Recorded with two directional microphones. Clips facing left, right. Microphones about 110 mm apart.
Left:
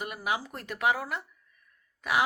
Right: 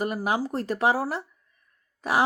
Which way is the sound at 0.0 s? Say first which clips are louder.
Right 6 dB; 40° right (ahead or behind).